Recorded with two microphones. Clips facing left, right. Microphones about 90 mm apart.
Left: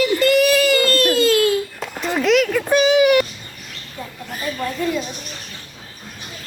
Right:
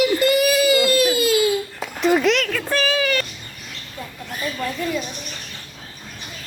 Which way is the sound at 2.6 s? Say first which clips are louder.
Left 7 dB; 20° left (ahead or behind).